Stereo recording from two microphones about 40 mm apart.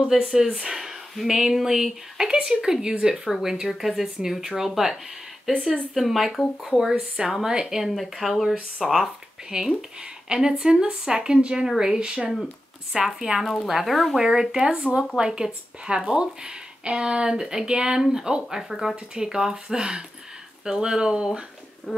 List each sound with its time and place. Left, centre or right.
0.1 s speech: centre
3.3 s speech: centre
9.5 s a woman's voice: centre
12.9 s speech: centre
14.2 s a woman's voice: centre
18.7 s speech: centre
19.1 s a woman's voice: centre